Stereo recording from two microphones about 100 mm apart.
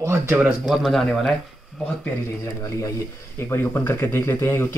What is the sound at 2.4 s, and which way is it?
Speech, 35° left (ahead or behind).